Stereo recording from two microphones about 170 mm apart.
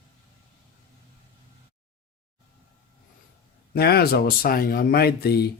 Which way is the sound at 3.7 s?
65° left (ahead or behind).